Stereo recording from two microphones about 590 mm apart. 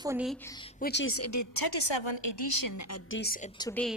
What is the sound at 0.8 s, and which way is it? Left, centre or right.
A woman's voice, centre.